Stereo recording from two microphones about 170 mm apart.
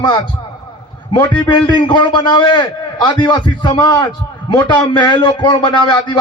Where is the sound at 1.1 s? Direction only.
25° left (ahead or behind).